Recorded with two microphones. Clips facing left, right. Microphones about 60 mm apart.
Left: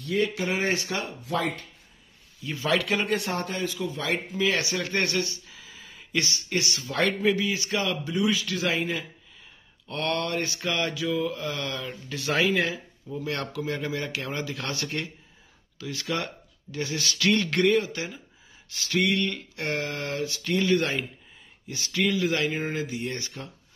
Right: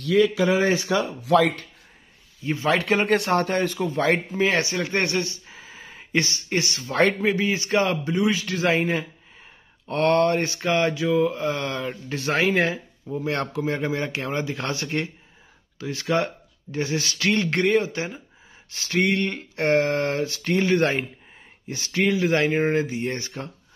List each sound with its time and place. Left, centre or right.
1.2 s speech: right
2.4 s speech: right
3.1 s speech: right